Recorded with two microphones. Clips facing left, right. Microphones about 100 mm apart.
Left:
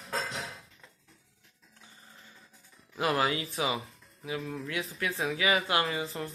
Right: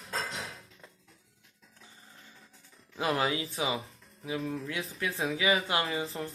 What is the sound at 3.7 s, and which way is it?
Speech, centre (ahead or behind).